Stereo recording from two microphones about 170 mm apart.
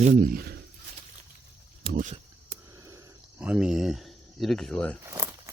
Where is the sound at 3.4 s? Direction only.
5° right (ahead or behind).